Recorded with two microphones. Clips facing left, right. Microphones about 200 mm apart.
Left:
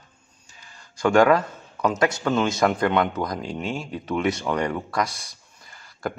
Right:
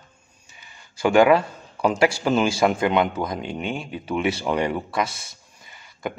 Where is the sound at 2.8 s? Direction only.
25° right (ahead or behind).